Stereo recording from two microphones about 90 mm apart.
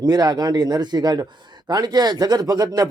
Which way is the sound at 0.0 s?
45° right (ahead or behind).